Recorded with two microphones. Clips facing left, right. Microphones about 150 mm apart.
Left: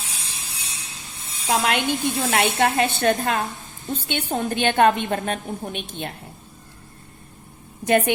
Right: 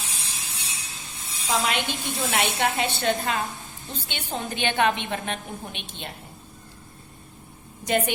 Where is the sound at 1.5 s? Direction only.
60° left (ahead or behind).